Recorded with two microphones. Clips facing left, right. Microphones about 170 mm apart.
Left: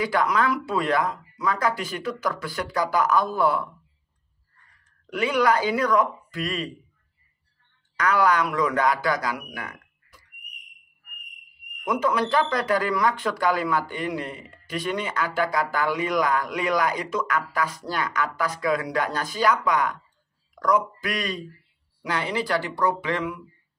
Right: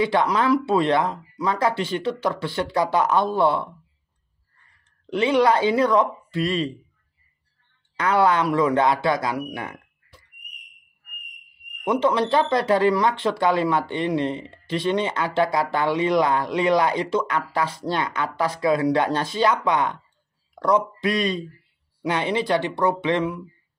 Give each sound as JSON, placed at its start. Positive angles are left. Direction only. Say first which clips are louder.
{"t": 0.0, "sound": "speech", "louder": "right 3 dB", "side_deg": -25}
{"t": 5.1, "sound": "speech", "louder": "right 3 dB", "side_deg": -25}
{"t": 8.0, "sound": "speech", "louder": "right 2 dB", "side_deg": -25}
{"t": 11.8, "sound": "speech", "louder": "right 3 dB", "side_deg": -30}